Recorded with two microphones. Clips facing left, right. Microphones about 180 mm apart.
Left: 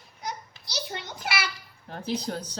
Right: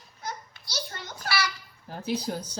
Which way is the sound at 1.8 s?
5° right (ahead or behind).